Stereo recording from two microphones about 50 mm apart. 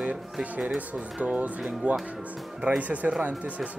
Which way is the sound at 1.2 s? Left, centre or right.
Right.